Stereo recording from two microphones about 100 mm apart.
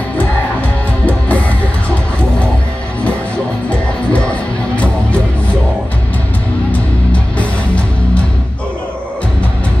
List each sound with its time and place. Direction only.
0.2 s music: 15° left (ahead or behind)
4.1 s music: 15° left (ahead or behind)
6.7 s music: 15° left (ahead or behind)